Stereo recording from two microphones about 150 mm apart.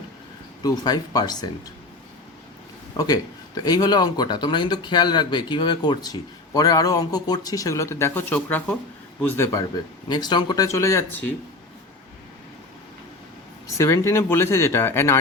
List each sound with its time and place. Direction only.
0.6 s speech: 25° left (ahead or behind)
3.0 s speech: 25° left (ahead or behind)
13.7 s speech: 20° left (ahead or behind)